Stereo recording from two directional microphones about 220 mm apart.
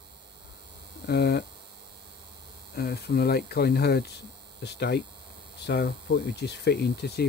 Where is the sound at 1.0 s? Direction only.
50° left (ahead or behind).